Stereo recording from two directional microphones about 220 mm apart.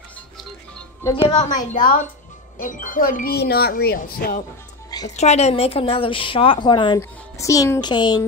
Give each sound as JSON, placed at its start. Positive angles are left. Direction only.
{"t": 1.3, "sound": "speech", "side_deg": 30}
{"t": 5.1, "sound": "a woman's voice", "side_deg": 30}